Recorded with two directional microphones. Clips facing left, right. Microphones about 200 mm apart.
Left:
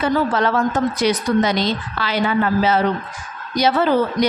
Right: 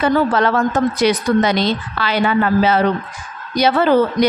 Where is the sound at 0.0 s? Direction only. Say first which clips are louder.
Right 3 dB; 65° right (ahead or behind).